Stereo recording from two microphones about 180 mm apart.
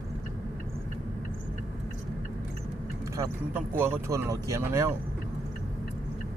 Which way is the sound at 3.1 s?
15° right (ahead or behind).